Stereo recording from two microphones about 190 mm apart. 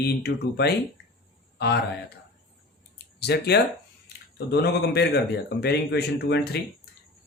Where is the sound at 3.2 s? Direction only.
60° left (ahead or behind).